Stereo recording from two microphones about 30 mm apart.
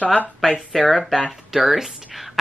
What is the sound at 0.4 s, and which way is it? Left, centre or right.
Speech, centre.